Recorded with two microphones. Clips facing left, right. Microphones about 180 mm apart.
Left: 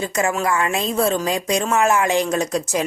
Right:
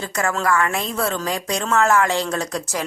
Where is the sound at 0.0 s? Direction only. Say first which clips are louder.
Left 2 dB; 15° left (ahead or behind).